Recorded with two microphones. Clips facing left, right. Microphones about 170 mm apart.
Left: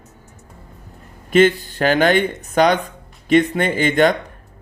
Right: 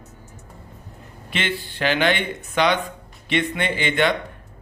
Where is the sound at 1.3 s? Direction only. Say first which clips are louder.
Left 14 dB; 45° left (ahead or behind).